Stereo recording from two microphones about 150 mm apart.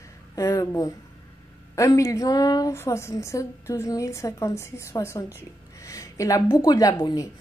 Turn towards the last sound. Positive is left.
turn(degrees=25)  # may be behind; listen again after turning